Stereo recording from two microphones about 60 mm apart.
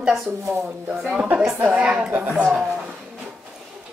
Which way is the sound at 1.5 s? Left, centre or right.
Right.